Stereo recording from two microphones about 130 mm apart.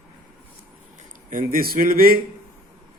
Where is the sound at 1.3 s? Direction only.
90° right.